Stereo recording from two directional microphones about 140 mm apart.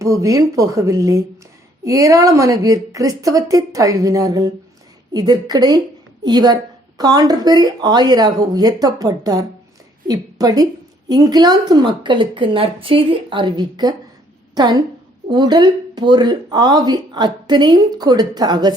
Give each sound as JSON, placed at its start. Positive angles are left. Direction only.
{"t": 0.0, "sound": "a woman's voice", "side_deg": -20}